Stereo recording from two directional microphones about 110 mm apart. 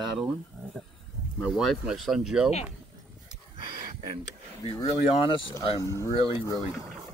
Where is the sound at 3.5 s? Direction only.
50° right (ahead or behind).